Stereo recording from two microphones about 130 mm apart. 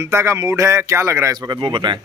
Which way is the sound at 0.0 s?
20° right (ahead or behind).